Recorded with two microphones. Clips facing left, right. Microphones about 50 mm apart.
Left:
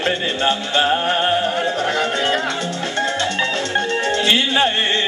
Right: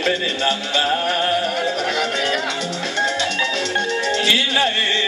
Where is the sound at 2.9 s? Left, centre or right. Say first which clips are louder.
Even; left.